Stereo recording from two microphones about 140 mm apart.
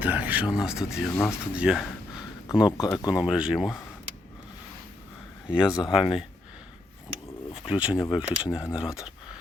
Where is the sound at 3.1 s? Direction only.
5° right (ahead or behind).